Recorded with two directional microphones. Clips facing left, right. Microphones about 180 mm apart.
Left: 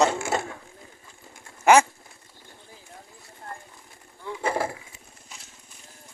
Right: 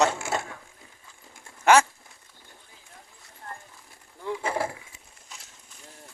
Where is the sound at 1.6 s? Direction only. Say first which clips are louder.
Left 2 dB; 10° left (ahead or behind).